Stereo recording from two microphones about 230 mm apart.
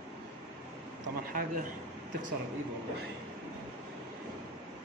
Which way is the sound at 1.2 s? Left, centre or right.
Right.